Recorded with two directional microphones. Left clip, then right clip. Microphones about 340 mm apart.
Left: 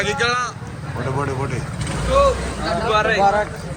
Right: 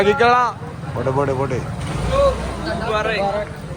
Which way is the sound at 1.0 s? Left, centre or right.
Centre.